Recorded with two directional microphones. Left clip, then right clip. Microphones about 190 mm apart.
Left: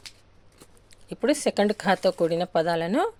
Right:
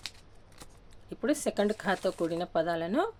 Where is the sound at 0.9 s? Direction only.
25° left (ahead or behind).